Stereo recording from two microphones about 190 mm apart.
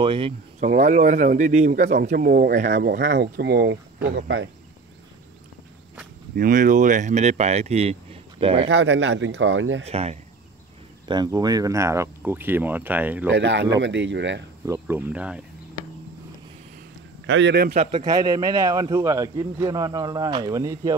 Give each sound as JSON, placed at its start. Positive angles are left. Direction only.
{"t": 0.0, "sound": "a man's voice", "side_deg": -25}
{"t": 0.8, "sound": "speech", "side_deg": -40}
{"t": 2.0, "sound": "speech", "side_deg": -50}
{"t": 2.7, "sound": "speech", "side_deg": -60}
{"t": 6.3, "sound": "speech", "side_deg": -45}
{"t": 8.6, "sound": "speech", "side_deg": -70}
{"t": 9.8, "sound": "speech", "side_deg": -35}
{"t": 11.1, "sound": "speech", "side_deg": -20}
{"t": 13.3, "sound": "speech", "side_deg": -65}
{"t": 14.7, "sound": "speech", "side_deg": -10}
{"t": 17.3, "sound": "speech", "side_deg": -65}
{"t": 18.0, "sound": "a man's voice", "side_deg": -20}